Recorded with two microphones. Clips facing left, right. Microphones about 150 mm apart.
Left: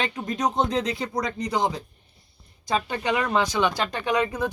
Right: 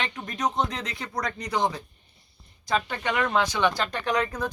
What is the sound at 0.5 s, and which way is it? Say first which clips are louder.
Speech: left 5 dB; 30° left (ahead or behind).